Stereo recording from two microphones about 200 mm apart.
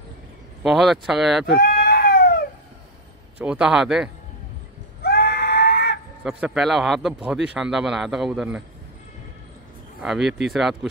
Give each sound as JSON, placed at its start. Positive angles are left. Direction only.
{"t": 0.6, "sound": "speech", "side_deg": 0}
{"t": 1.5, "sound": "a sound", "side_deg": 50}
{"t": 3.3, "sound": "speech", "side_deg": -5}
{"t": 5.0, "sound": "screaming", "side_deg": 50}
{"t": 6.2, "sound": "speech", "side_deg": -5}
{"t": 10.0, "sound": "speech", "side_deg": 0}